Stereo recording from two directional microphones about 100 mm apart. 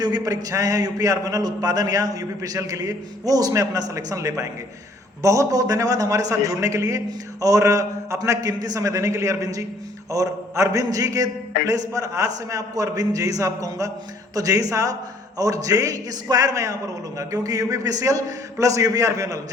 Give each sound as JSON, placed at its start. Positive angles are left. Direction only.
{"t": 0.0, "sound": "a man's voice", "side_deg": -40}